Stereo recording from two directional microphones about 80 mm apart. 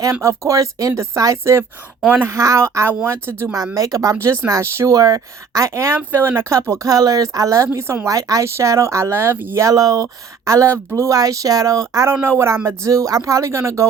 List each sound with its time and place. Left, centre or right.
0.1 s speech: right
2.0 s speech: centre
2.3 s speech: right
3.8 s speech: right
4.9 s speech: right
9.6 s speech: right